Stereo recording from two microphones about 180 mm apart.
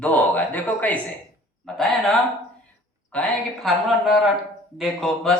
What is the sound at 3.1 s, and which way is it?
Speech, 5° left (ahead or behind).